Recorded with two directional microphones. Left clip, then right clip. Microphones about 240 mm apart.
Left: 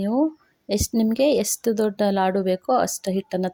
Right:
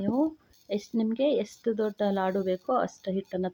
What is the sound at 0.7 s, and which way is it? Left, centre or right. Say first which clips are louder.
A woman's voice: left 7 dB; left.